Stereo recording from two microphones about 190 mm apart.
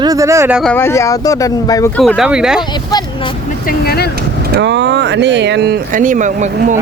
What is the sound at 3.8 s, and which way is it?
Speech, 55° left (ahead or behind).